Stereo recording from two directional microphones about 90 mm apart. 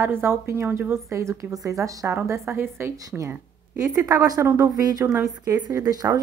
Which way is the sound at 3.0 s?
40° right (ahead or behind).